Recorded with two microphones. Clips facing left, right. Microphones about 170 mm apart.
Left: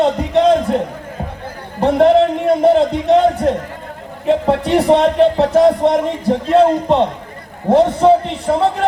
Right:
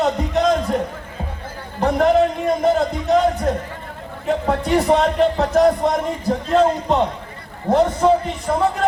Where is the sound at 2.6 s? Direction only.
30° left (ahead or behind).